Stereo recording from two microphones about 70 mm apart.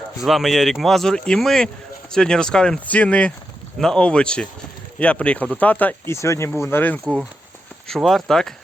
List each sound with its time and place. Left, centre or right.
0.2 s speech: centre
2.8 s speech: left
6.1 s speech: left
6.6 s speech: left
7.9 s speech: centre